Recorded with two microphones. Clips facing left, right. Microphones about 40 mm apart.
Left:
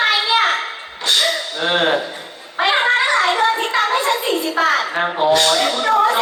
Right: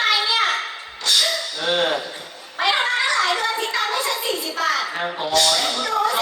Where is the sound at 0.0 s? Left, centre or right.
Left.